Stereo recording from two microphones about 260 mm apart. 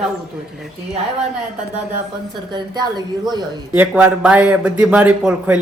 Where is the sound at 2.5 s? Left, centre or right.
Centre.